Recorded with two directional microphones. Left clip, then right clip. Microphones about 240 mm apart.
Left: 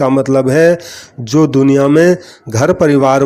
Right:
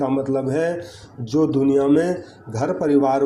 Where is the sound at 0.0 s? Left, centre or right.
Left.